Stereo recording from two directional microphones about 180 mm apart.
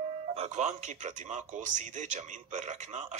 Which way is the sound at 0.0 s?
35° right (ahead or behind).